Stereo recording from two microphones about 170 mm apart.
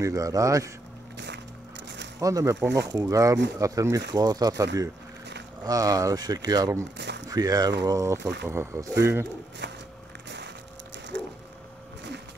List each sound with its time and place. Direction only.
0.0 s speech: 20° right (ahead or behind)
1.1 s music: 90° right
2.1 s speech: 20° right (ahead or behind)
7.0 s a sound: 90° right
7.2 s speech: 20° right (ahead or behind)
8.2 s speech: 80° right
8.5 s speech: 15° right (ahead or behind)
9.6 s a sound: 90° right